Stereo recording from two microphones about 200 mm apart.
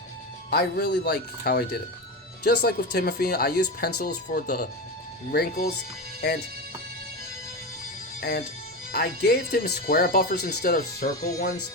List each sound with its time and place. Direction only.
0.5 s speech: 55° left (ahead or behind)
6.2 s music: 55° left (ahead or behind)
8.2 s music: 55° left (ahead or behind)
8.9 s speech: 50° left (ahead or behind)